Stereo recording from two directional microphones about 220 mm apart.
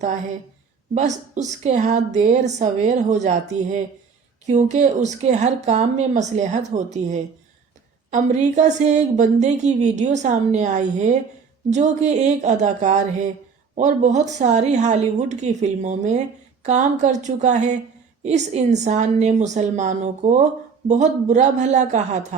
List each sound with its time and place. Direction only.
0.9 s a woman's voice: 30° right (ahead or behind)